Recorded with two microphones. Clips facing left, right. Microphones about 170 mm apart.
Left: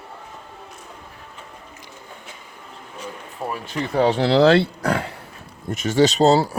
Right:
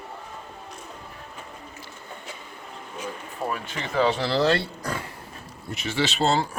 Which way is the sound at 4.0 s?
65° left (ahead or behind).